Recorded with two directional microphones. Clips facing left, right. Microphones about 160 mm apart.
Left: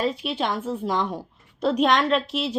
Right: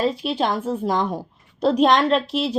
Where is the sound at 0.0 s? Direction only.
35° right (ahead or behind).